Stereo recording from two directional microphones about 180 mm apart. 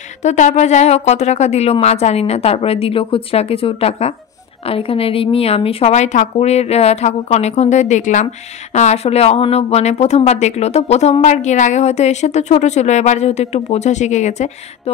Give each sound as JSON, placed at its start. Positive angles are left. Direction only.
{"t": 0.2, "sound": "speech", "side_deg": 40}